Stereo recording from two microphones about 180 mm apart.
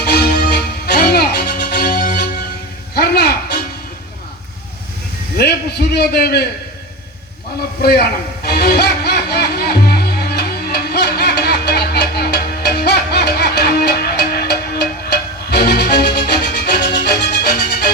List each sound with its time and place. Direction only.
0.0 s music: 60° left (ahead or behind)
5.4 s a sound: 60° left (ahead or behind)
7.8 s a man's voice: 60° left (ahead or behind)
8.4 s music: 60° left (ahead or behind)